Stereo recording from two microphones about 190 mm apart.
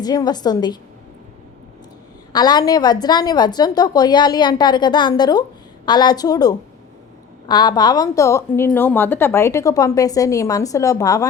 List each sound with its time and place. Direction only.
0.0 s a woman's voice: 20° left (ahead or behind)
2.3 s a woman's voice: 20° left (ahead or behind)